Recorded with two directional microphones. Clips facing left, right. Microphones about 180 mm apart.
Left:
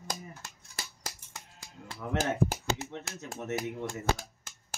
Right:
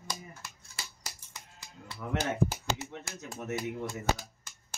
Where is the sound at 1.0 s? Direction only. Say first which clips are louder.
Left 3 dB; 45° left (ahead or behind).